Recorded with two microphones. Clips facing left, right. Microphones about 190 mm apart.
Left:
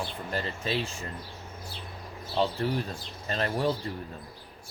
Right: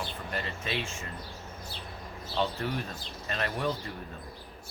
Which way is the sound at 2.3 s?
30° left (ahead or behind).